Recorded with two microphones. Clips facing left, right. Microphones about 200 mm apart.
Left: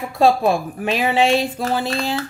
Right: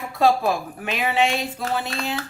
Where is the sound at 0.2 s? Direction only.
25° left (ahead or behind).